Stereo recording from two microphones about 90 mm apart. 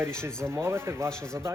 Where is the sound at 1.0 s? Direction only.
10° left (ahead or behind).